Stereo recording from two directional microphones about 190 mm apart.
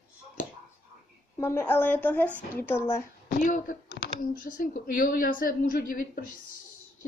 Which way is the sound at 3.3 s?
45° left (ahead or behind).